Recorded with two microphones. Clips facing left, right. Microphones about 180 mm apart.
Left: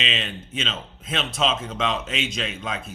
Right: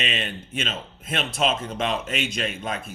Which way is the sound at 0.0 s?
55° right (ahead or behind).